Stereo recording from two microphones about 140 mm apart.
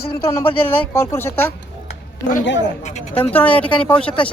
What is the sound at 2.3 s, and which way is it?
Speech, 65° left (ahead or behind).